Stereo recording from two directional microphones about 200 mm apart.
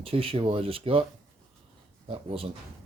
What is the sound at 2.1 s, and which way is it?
Speech, 30° right (ahead or behind).